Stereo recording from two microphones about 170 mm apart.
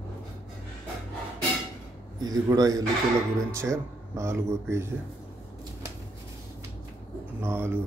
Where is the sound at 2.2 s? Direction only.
20° right (ahead or behind).